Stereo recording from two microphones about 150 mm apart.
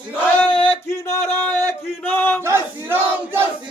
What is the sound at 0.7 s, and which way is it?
Music, 15° left (ahead or behind).